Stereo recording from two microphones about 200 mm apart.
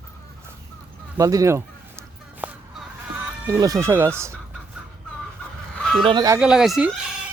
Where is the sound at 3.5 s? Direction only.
15° right (ahead or behind).